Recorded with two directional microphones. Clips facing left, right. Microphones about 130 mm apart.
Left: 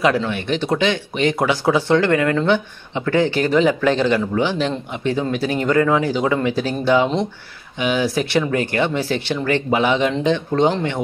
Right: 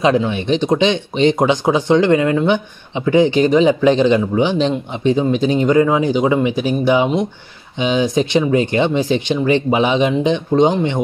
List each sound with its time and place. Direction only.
0.0 s speech: 20° right (ahead or behind)